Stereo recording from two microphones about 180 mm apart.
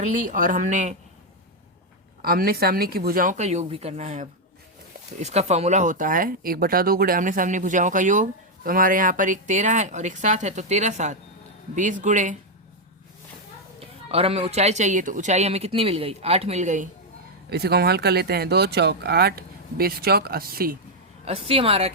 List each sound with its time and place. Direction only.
0.0 s speech: 45° right (ahead or behind)
2.2 s speech: 55° right (ahead or behind)
13.7 s speech: 35° right (ahead or behind)
17.5 s speech: 60° right (ahead or behind)
21.2 s speech: 35° right (ahead or behind)